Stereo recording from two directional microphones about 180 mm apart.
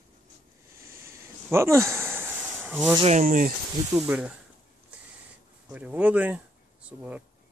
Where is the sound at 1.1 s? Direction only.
15° right (ahead or behind).